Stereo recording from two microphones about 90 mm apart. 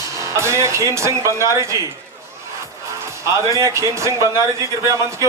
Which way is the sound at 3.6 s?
35° right (ahead or behind).